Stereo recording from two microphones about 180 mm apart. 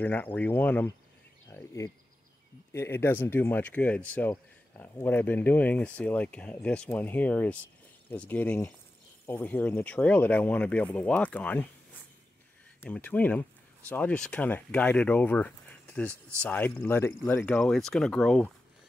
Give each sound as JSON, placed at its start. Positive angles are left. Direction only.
{"t": 0.0, "sound": "speech", "side_deg": 10}
{"t": 12.8, "sound": "speech", "side_deg": 10}